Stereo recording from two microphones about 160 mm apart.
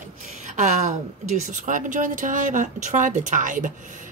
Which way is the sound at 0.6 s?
45° right (ahead or behind).